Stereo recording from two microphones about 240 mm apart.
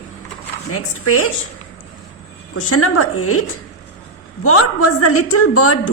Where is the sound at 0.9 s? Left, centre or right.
Left.